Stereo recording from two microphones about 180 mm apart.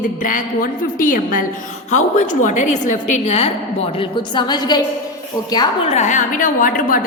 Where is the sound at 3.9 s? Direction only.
25° left (ahead or behind).